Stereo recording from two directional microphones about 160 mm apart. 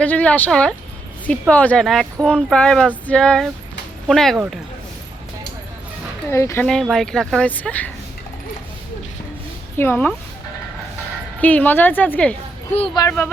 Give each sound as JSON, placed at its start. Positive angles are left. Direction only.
{"t": 0.0, "sound": "a woman's voice", "side_deg": 10}
{"t": 6.3, "sound": "a woman's voice", "side_deg": 15}
{"t": 6.8, "sound": "speech", "side_deg": 5}
{"t": 9.7, "sound": "a woman's voice", "side_deg": 15}
{"t": 11.3, "sound": "a woman's voice", "side_deg": 10}
{"t": 12.7, "sound": "speech", "side_deg": 35}
{"t": 13.0, "sound": "a woman's voice", "side_deg": 15}